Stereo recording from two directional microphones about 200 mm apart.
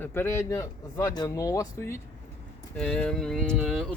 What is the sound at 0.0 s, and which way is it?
Speech, 10° left (ahead or behind).